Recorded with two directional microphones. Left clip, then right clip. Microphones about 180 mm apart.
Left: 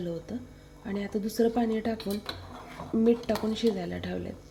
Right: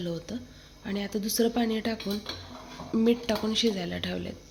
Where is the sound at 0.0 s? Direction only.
Centre (ahead or behind).